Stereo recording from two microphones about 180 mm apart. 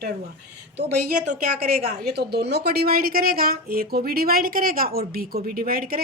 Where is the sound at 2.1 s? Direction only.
65° right (ahead or behind).